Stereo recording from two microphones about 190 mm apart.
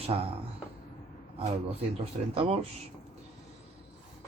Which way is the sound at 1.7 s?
30° right (ahead or behind).